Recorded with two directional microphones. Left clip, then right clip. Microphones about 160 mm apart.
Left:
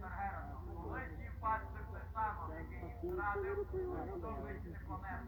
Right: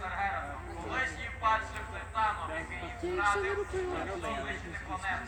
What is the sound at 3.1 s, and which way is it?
A man's voice, 15° right (ahead or behind).